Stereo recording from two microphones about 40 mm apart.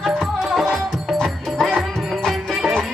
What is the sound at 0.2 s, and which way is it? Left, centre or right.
Music, centre.